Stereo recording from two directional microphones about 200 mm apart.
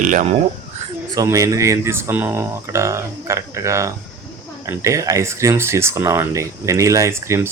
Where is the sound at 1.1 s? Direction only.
15° right (ahead or behind).